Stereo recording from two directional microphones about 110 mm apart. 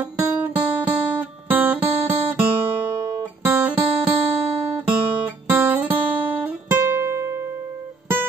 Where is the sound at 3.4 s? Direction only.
15° right (ahead or behind).